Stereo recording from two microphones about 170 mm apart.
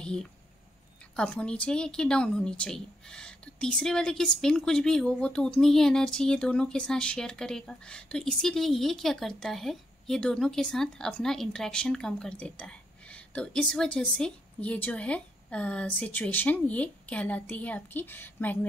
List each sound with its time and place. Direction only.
0.0 s a woman's voice: 5° left (ahead or behind)